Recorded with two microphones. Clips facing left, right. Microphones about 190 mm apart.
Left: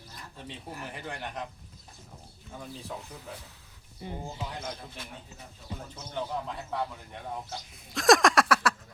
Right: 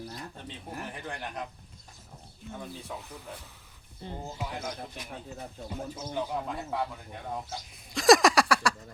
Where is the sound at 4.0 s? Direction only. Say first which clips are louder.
Left 1 dB; 10° left (ahead or behind).